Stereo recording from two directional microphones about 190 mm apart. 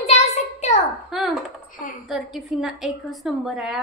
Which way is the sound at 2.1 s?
Centre (ahead or behind).